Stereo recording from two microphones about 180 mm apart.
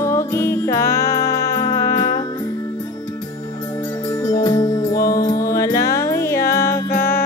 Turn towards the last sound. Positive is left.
turn(degrees=55)  # may be behind; listen again after turning